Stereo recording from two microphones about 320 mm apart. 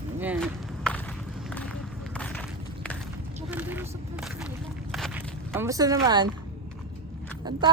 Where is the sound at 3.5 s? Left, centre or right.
Centre.